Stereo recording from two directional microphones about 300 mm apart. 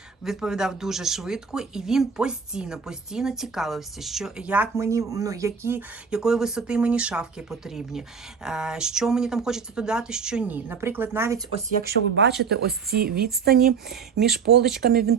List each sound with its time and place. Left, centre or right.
0.3 s speech: centre
11.8 s speech: right
14.8 s speech: right